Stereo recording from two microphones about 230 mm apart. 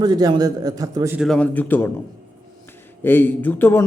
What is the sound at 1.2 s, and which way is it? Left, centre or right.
Speech, centre.